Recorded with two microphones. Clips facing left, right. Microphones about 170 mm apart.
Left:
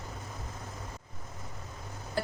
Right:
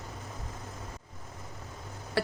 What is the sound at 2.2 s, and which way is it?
Tick-tock, 80° right.